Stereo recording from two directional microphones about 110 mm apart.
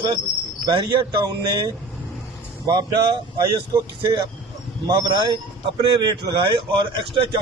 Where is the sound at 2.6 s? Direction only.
45° right (ahead or behind).